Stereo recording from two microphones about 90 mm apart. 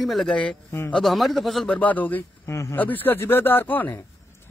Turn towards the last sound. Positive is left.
turn(degrees=20)  # may be behind; listen again after turning